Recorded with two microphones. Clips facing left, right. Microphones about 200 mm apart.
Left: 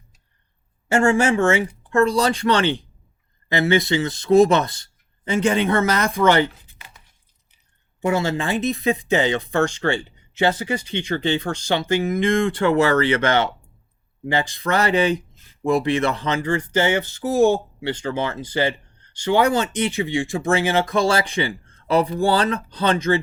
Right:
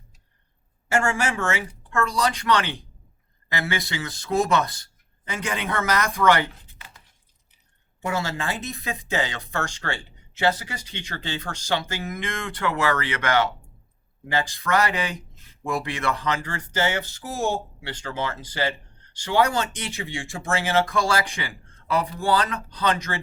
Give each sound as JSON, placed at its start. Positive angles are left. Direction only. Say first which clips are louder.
{"t": 0.9, "sound": "speech", "louder": "left 7 dB", "side_deg": 25}
{"t": 8.0, "sound": "speech", "louder": "left 6 dB", "side_deg": 20}